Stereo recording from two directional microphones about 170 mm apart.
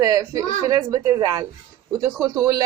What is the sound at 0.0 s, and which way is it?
Speech, 20° right (ahead or behind).